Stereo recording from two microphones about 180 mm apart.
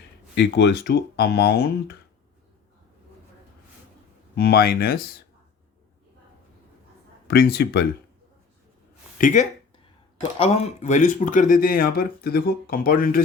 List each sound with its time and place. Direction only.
0.3 s speech: 75° left (ahead or behind)
4.4 s speech: 55° left (ahead or behind)
7.3 s speech: 60° left (ahead or behind)
9.1 s speech: 45° left (ahead or behind)
10.3 s speech: 35° left (ahead or behind); by 13.2 s 55° left (ahead or behind)